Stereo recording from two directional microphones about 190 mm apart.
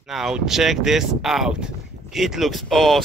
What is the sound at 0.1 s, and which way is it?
Speech, centre (ahead or behind).